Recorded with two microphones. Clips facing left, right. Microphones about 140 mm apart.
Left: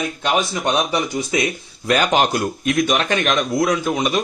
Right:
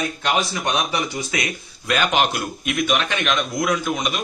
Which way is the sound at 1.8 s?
35° left (ahead or behind).